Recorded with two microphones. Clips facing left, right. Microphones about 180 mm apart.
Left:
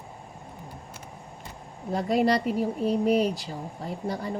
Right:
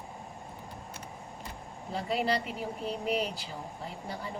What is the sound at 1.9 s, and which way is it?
A woman's voice, 45° left (ahead or behind).